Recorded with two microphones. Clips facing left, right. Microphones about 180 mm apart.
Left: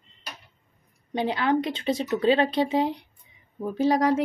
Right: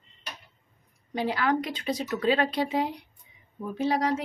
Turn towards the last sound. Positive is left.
turn(degrees=40)  # may be behind; listen again after turning